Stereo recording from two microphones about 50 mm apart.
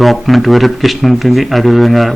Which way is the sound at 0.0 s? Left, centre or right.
Centre.